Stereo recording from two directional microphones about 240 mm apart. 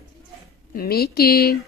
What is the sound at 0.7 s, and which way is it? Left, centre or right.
Speech, left.